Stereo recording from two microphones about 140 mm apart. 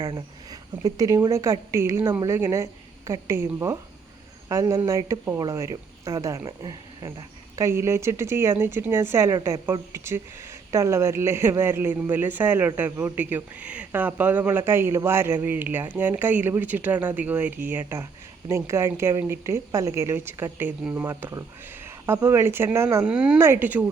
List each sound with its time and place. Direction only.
0.0 s speech: 30° right (ahead or behind)
23.0 s speech: 5° right (ahead or behind)